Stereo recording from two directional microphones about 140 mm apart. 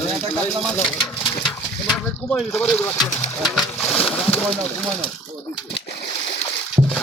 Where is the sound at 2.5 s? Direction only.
10° left (ahead or behind).